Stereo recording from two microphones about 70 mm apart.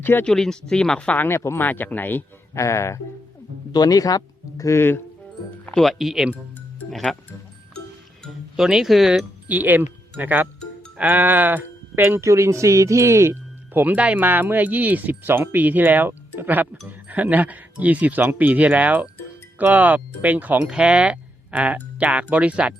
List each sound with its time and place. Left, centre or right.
0.0 s speech: left
0.3 s speech: centre
1.2 s speech: left
2.6 s speech: left
3.7 s speech: left
5.8 s speech: centre
8.5 s speech: centre
9.5 s speech: right
12.0 s speech: right
13.7 s speech: right